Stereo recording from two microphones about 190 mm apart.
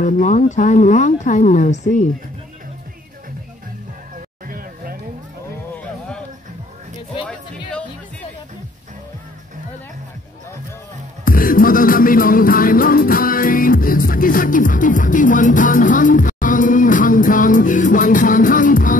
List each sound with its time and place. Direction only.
0.0 s speech: 40° left (ahead or behind)
4.5 s a sound: 50° right (ahead or behind)
11.2 s music: 50° left (ahead or behind)